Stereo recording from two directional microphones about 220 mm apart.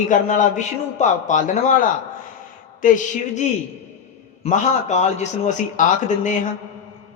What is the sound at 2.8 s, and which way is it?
A man's voice, 35° left (ahead or behind).